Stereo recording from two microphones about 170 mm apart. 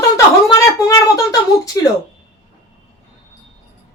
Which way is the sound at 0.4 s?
20° left (ahead or behind).